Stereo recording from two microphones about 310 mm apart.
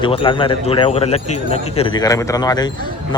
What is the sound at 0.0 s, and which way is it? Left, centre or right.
Speech, centre.